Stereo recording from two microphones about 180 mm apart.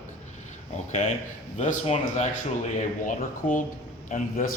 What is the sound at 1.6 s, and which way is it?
A man's voice, 45° left (ahead or behind).